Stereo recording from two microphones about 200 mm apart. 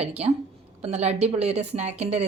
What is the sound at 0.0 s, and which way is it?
A woman's voice, 30° right (ahead or behind).